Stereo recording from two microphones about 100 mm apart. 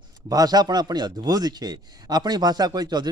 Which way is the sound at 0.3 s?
40° right (ahead or behind).